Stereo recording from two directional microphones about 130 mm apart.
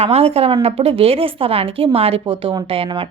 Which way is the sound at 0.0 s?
50° right (ahead or behind).